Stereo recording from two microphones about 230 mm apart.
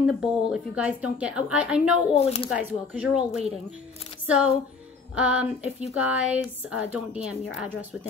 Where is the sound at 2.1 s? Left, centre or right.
Left.